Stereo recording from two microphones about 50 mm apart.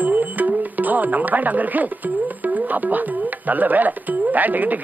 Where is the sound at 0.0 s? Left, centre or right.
Right.